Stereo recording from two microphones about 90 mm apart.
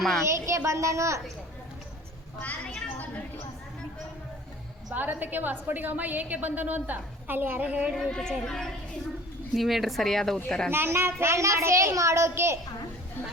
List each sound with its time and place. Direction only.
0.0 s a woman's voice: 5° left (ahead or behind)
0.3 s a child's voice: 35° right (ahead or behind)
2.4 s a woman's voice: 15° left (ahead or behind)
4.9 s a woman's voice: 20° right (ahead or behind)
7.9 s a woman's voice: 5° left (ahead or behind)
10.7 s a child's voice: 25° right (ahead or behind)